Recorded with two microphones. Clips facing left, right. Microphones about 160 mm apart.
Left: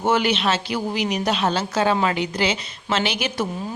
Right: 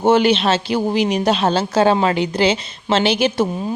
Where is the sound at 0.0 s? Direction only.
30° right (ahead or behind).